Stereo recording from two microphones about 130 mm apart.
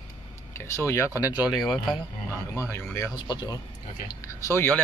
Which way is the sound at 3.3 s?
35° left (ahead or behind).